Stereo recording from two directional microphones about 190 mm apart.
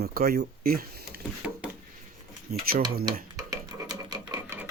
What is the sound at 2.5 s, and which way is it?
Speech, 55° right (ahead or behind).